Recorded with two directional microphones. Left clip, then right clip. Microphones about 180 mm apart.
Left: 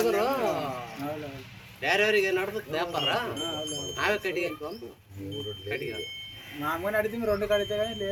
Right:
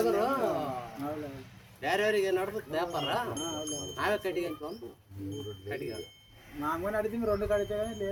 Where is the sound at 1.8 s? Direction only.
70° right (ahead or behind).